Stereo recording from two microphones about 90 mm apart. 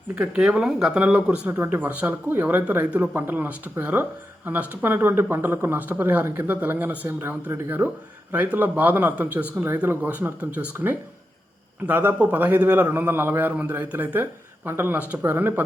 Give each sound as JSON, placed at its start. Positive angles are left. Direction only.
{"t": 0.2, "sound": "speech", "side_deg": -10}
{"t": 1.5, "sound": "speech", "side_deg": -25}